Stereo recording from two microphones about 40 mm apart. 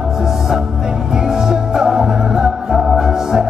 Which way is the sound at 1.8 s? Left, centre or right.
Centre.